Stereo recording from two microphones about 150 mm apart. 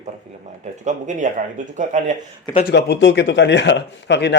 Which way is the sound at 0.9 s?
55° right (ahead or behind).